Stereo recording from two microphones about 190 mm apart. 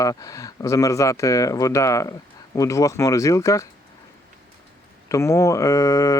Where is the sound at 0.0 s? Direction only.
15° left (ahead or behind).